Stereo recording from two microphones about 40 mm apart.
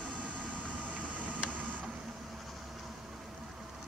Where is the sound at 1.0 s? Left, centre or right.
Right.